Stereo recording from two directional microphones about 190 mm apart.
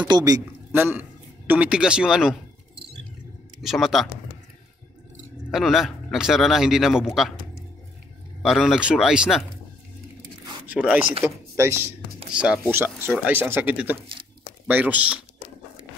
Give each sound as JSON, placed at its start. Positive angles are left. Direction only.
{"t": 0.1, "sound": "a man's voice", "side_deg": -20}
{"t": 3.6, "sound": "a man's voice", "side_deg": 0}
{"t": 5.5, "sound": "a man's voice", "side_deg": 0}
{"t": 8.4, "sound": "a man's voice", "side_deg": 0}
{"t": 10.7, "sound": "speech", "side_deg": -5}
{"t": 13.9, "sound": "a sound", "side_deg": -25}
{"t": 14.7, "sound": "speech", "side_deg": -10}